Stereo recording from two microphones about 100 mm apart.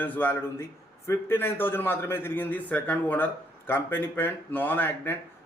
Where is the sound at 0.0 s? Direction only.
20° left (ahead or behind).